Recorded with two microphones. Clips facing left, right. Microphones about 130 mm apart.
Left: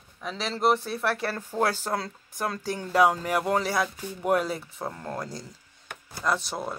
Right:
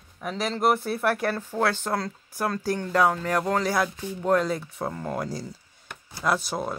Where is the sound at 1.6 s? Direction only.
5° left (ahead or behind).